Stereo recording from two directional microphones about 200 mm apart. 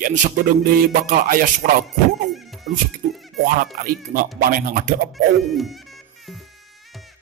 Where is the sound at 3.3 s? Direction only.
45° right (ahead or behind).